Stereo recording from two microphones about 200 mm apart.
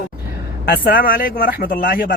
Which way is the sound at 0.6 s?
50° left (ahead or behind).